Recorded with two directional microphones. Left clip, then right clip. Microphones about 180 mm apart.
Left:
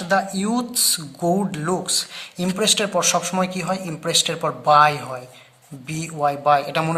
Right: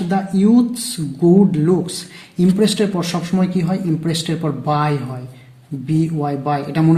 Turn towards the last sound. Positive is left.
turn(degrees=30)  # may be behind; listen again after turning